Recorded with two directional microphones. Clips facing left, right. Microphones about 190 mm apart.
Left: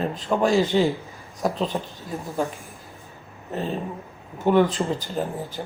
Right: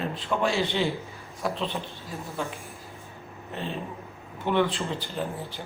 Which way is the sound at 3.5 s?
40° left (ahead or behind).